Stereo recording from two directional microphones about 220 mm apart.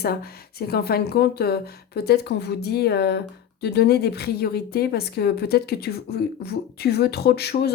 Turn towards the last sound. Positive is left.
turn(degrees=45)  # may be behind; listen again after turning